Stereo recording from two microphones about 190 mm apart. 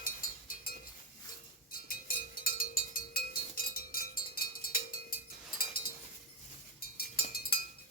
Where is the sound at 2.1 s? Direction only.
50° left (ahead or behind).